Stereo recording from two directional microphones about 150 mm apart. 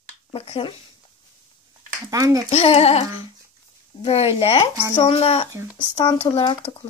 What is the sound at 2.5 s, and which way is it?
Speech, 45° left (ahead or behind).